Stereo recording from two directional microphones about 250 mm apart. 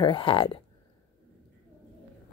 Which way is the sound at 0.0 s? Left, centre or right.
Centre.